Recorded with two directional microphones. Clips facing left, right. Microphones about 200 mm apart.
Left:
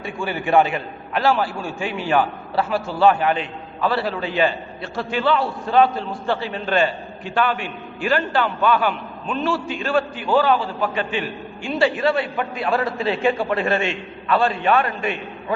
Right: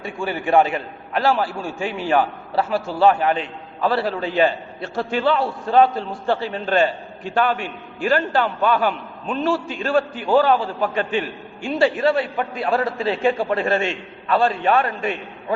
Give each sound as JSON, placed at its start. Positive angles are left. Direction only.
{"t": 0.0, "sound": "a man's voice", "side_deg": -40}